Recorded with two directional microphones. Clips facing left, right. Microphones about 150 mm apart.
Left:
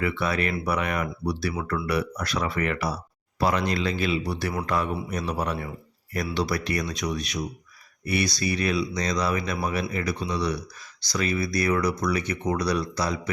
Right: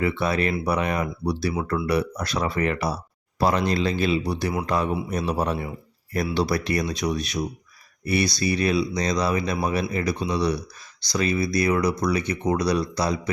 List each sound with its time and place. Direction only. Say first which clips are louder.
0.0 s speech: right 3 dB; 25° right (ahead or behind)
12.3 s speech: right 3 dB; 30° right (ahead or behind)